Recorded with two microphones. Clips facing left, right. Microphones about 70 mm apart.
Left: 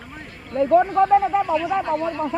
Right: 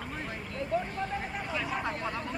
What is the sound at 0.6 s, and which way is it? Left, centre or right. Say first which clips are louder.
Speech: left 17 dB; left.